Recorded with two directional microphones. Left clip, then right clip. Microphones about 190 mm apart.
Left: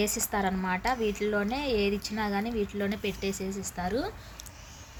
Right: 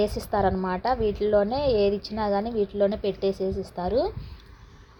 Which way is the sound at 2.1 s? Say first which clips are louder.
Right 6 dB; 20° left (ahead or behind).